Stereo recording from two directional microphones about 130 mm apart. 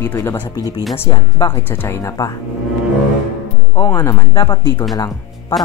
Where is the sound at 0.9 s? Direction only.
40° left (ahead or behind).